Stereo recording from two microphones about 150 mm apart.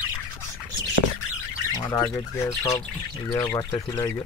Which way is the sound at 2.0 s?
15° left (ahead or behind).